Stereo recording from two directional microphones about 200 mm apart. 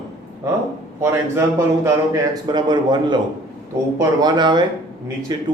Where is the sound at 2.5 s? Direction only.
20° right (ahead or behind).